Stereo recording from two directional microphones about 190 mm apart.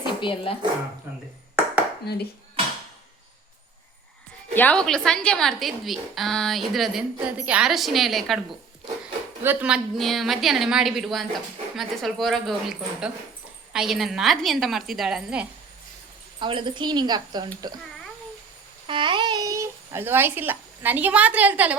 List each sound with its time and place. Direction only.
0.0 s dog: 25° left (ahead or behind)
2.1 s speech: 55° left (ahead or behind)
4.5 s speech: 5° left (ahead or behind)
9.4 s speech: 10° right (ahead or behind)
16.4 s a woman's voice: 25° right (ahead or behind)
18.9 s speech: 25° right (ahead or behind); by 21.8 s 10° right (ahead or behind)